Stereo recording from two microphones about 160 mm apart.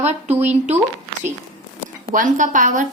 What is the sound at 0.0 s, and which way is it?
Speech, 45° right (ahead or behind).